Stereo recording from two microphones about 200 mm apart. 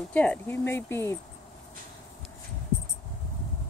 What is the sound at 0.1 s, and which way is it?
Speech, 5° left (ahead or behind).